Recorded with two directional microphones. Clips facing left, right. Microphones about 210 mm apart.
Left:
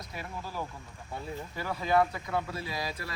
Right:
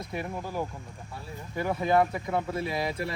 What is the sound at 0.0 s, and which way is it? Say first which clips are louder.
Speech: right 6 dB; 20° right (ahead or behind).